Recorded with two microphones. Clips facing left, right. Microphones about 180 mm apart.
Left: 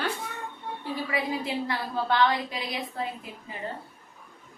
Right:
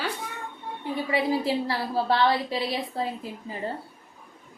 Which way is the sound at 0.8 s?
25° right (ahead or behind).